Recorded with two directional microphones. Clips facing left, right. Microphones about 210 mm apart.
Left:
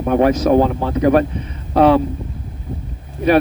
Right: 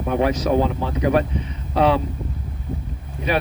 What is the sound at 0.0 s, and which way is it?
Speech, 50° left (ahead or behind).